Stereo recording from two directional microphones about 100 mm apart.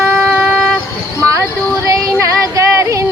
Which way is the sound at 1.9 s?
35° right (ahead or behind).